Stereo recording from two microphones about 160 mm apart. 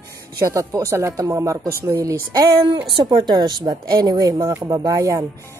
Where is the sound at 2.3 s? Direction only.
30° right (ahead or behind).